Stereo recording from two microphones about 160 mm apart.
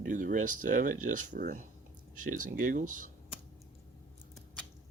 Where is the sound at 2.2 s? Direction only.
60° right (ahead or behind).